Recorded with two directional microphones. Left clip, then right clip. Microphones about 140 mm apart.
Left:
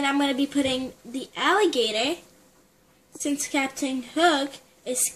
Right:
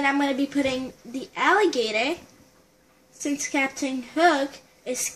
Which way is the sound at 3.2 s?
10° left (ahead or behind).